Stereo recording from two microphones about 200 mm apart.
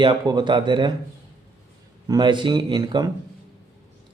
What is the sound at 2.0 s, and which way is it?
A man's voice, 20° right (ahead or behind).